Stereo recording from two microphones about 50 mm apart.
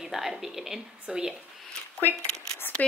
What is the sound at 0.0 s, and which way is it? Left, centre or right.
A woman's voice, centre.